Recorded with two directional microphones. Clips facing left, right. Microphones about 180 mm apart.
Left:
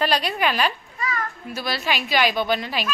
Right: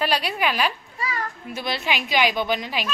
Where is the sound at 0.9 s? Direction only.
35° right (ahead or behind).